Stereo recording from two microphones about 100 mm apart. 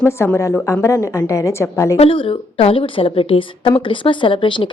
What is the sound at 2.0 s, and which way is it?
A woman's voice, 60° left (ahead or behind).